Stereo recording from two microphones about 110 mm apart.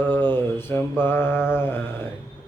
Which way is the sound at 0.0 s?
20° left (ahead or behind).